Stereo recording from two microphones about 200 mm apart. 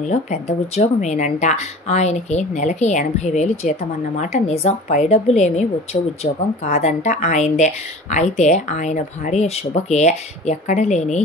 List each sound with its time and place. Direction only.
0.1 s a woman's voice: 35° left (ahead or behind)